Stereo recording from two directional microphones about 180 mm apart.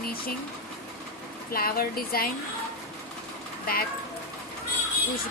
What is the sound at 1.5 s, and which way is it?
Speech, 55° left (ahead or behind).